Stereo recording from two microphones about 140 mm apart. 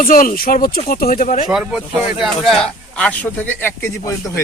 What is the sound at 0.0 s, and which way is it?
Speech, 80° left.